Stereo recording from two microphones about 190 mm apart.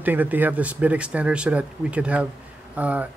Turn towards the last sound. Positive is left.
turn(degrees=-10)  # may be behind; listen again after turning